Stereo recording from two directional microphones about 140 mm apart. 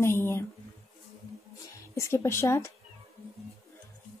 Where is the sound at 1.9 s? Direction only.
20° left (ahead or behind).